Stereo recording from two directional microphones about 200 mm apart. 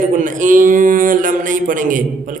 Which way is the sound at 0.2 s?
40° right (ahead or behind).